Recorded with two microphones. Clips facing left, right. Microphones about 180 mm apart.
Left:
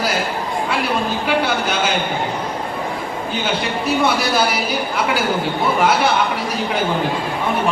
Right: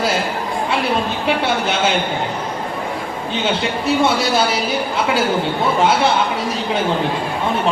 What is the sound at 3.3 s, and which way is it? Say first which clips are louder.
A woman's voice: right 2 dB; 25° right (ahead or behind).